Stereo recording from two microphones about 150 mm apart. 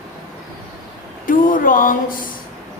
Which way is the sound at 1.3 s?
65° left (ahead or behind).